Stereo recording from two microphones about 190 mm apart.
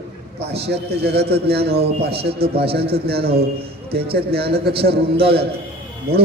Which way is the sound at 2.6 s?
60° right (ahead or behind).